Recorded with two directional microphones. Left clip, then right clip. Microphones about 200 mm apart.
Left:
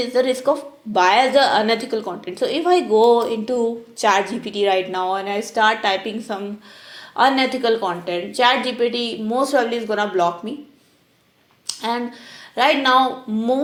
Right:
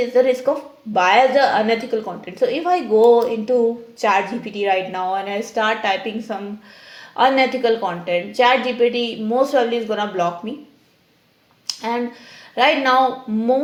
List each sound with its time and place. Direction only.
0.0 s a woman's voice: 30° left (ahead or behind)
11.6 s a sound: 30° left (ahead or behind)
12.5 s a woman's voice: 30° left (ahead or behind)